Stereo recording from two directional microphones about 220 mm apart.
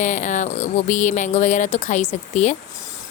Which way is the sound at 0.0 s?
35° left (ahead or behind).